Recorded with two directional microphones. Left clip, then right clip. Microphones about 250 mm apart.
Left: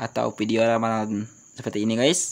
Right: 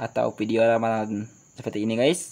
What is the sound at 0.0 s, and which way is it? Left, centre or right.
Speech, left.